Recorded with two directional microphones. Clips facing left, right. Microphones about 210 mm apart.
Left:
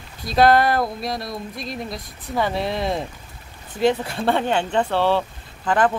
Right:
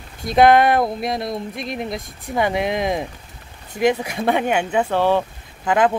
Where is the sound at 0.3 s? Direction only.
20° right (ahead or behind).